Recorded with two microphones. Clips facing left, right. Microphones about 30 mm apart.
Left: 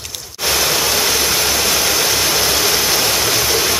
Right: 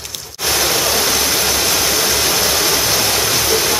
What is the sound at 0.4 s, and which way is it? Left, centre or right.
Vehicle, centre.